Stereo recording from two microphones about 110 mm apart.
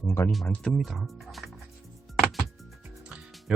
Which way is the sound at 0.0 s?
25° left (ahead or behind).